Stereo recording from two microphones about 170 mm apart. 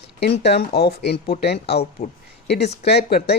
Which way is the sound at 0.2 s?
80° left.